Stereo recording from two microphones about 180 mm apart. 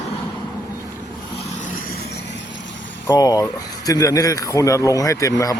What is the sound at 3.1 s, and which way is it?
Speech, 20° left (ahead or behind).